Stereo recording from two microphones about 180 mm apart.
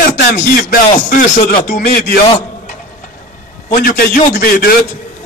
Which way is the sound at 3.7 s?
55° left (ahead or behind).